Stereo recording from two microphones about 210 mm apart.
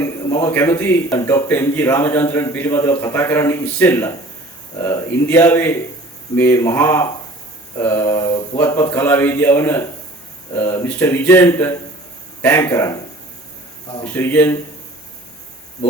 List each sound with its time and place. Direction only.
0.0 s a man's voice: 15° left (ahead or behind)
14.1 s a man's voice: 10° left (ahead or behind)